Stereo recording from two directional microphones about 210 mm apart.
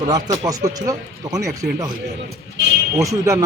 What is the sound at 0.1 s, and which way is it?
Speech, 15° right (ahead or behind).